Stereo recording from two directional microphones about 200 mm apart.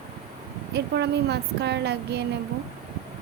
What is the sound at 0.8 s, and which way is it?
A woman's voice, 55° right (ahead or behind).